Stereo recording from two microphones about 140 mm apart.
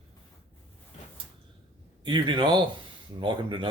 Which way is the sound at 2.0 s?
35° right (ahead or behind).